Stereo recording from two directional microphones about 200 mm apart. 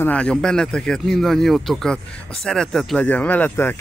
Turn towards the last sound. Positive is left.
turn(degrees=10)  # may be behind; listen again after turning